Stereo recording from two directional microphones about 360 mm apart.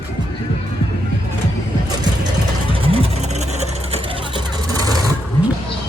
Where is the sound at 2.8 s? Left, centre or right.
Centre.